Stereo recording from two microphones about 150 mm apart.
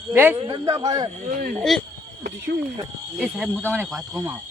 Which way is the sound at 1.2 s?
75° right (ahead or behind).